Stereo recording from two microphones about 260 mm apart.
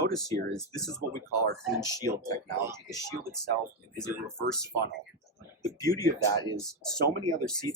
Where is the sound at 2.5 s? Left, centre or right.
Centre.